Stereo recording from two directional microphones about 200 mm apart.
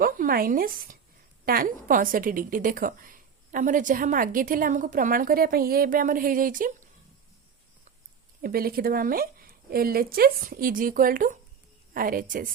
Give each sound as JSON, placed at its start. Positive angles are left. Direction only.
{"t": 0.0, "sound": "a woman's voice", "side_deg": -45}
{"t": 8.4, "sound": "a woman's voice", "side_deg": -50}